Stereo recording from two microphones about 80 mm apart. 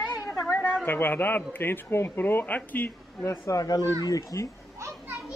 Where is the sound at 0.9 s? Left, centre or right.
Left.